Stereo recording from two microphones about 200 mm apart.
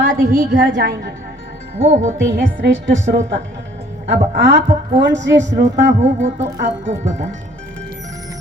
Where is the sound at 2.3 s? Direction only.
60° right (ahead or behind).